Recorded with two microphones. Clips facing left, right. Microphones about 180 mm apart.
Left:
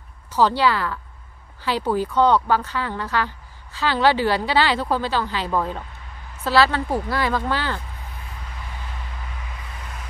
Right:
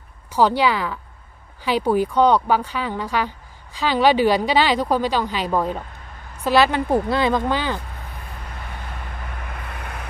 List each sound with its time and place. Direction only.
0.3 s a woman's voice: 15° right (ahead or behind)
9.2 s vehicle: 60° right (ahead or behind)